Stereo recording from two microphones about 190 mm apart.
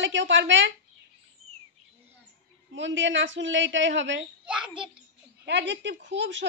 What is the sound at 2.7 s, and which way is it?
A woman's voice, 75° right (ahead or behind).